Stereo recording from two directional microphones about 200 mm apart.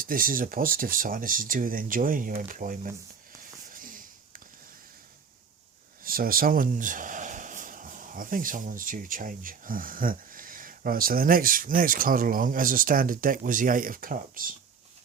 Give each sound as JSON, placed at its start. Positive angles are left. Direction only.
{"t": 0.0, "sound": "speech", "side_deg": -45}
{"t": 3.7, "sound": "a sound", "side_deg": -45}
{"t": 6.0, "sound": "speech", "side_deg": -45}